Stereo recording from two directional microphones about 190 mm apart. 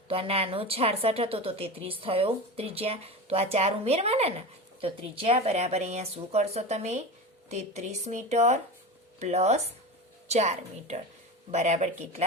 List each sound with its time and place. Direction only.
0.1 s a woman's voice: 30° right (ahead or behind)